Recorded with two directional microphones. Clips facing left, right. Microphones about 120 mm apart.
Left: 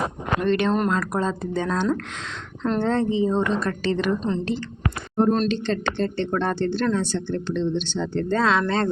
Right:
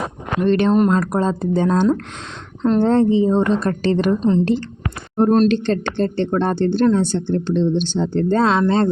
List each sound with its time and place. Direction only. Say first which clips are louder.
0.4 s speech: right 7 dB; 35° right (ahead or behind)
2.9 s speech: right 6 dB; 35° right (ahead or behind)
6.3 s speech: right 6 dB; 35° right (ahead or behind)